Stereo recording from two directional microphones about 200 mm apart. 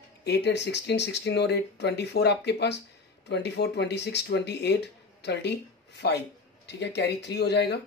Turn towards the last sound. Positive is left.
turn(degrees=55)  # may be behind; listen again after turning